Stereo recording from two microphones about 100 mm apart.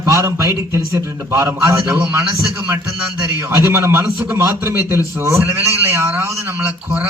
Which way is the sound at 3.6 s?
25° right (ahead or behind).